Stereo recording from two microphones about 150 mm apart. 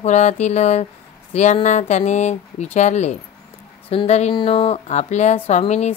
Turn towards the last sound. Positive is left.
turn(degrees=50)  # may be behind; listen again after turning